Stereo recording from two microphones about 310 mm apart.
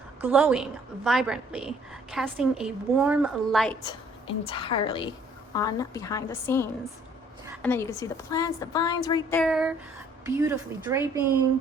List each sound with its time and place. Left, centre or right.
0.2 s a woman's voice: centre
3.8 s a woman's voice: centre
9.4 s a woman's voice: centre